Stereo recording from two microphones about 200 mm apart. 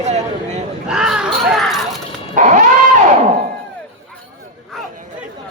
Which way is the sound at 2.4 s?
40° right (ahead or behind).